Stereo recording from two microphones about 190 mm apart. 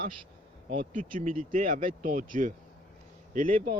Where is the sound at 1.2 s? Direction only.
45° right (ahead or behind).